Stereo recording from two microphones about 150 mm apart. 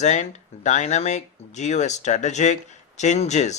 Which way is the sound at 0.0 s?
50° left (ahead or behind).